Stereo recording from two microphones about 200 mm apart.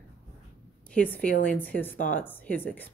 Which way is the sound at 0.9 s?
5° left (ahead or behind).